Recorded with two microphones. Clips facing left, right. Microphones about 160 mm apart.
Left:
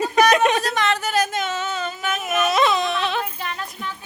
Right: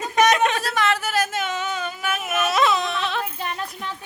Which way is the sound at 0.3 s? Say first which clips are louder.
Left 3 dB; 20° left (ahead or behind).